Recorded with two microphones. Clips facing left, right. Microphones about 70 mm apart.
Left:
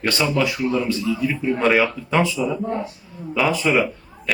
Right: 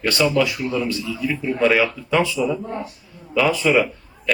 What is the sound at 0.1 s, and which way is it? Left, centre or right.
Speech, left.